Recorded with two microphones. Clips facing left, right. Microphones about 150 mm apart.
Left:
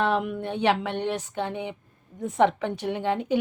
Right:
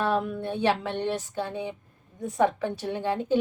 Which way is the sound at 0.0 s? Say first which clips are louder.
Left 1 dB; 20° left (ahead or behind).